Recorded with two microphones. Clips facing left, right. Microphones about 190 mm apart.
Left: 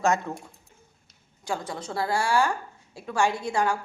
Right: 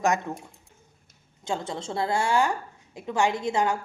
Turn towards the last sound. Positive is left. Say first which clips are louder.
# right 1 dB
turn(degrees=-20)  # may be behind; listen again after turning